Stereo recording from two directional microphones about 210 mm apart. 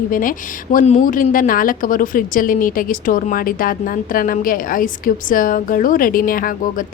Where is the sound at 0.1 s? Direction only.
40° left (ahead or behind).